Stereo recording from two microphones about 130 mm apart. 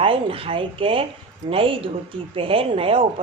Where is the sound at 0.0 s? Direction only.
45° right (ahead or behind).